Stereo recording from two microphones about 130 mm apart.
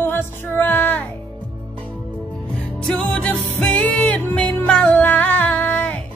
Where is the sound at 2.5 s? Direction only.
5° left (ahead or behind).